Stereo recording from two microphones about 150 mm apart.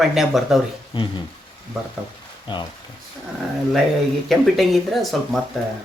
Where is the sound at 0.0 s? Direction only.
Centre (ahead or behind).